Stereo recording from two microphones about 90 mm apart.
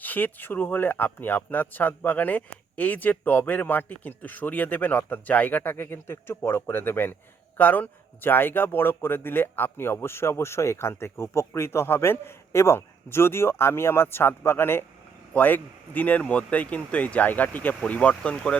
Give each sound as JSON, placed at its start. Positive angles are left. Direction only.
{"t": 0.0, "sound": "speech", "side_deg": 20}